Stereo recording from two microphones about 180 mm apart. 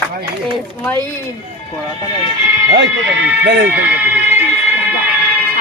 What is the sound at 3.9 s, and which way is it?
Fire alarm, 10° right (ahead or behind).